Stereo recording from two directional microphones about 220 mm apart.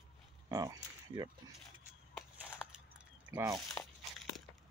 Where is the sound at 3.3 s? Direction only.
10° right (ahead or behind).